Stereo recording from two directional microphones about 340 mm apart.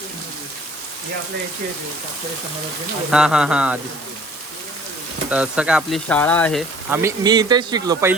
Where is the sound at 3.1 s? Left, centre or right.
Centre.